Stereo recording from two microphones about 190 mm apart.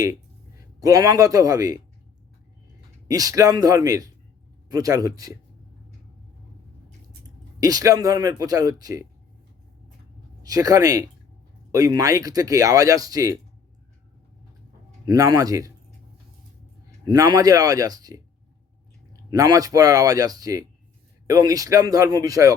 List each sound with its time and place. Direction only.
0.8 s speech: 20° right (ahead or behind)
3.1 s speech: 20° right (ahead or behind)
7.6 s speech: 20° right (ahead or behind)
10.4 s speech: 20° right (ahead or behind)
15.0 s speech: 20° right (ahead or behind)
17.1 s speech: 20° right (ahead or behind)